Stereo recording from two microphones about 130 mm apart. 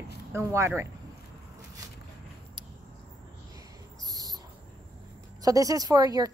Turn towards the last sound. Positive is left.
turn(degrees=-30)  # may be behind; listen again after turning